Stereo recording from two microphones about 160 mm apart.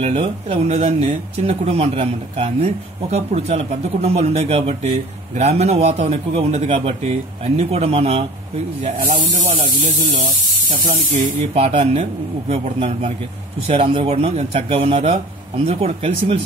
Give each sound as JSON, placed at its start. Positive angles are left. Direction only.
{"t": 0.0, "sound": "speech", "side_deg": -35}
{"t": 8.8, "sound": "snake", "side_deg": -50}
{"t": 11.5, "sound": "speech", "side_deg": -40}